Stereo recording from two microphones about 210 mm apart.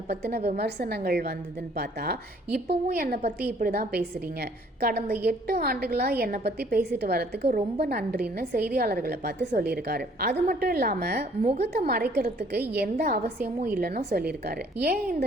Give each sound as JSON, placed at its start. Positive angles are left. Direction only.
{"t": 0.1, "sound": "a woman's voice", "side_deg": -50}